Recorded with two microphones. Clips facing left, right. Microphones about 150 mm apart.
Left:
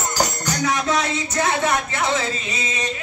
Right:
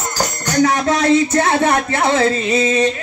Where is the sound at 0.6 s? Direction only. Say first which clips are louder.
Right 6 dB; 60° right (ahead or behind).